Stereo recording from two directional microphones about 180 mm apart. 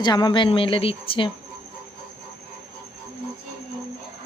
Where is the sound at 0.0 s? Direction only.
25° left (ahead or behind).